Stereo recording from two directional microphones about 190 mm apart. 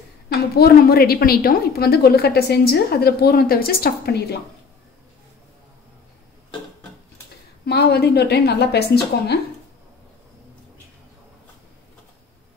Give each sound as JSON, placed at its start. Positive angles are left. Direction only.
{"t": 0.3, "sound": "a woman's voice", "side_deg": 55}
{"t": 7.6, "sound": "a woman's voice", "side_deg": 60}